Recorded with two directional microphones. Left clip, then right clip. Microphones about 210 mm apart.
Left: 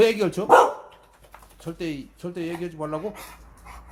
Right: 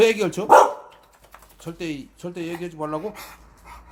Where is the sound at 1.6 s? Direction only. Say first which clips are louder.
Even; 5° right (ahead or behind).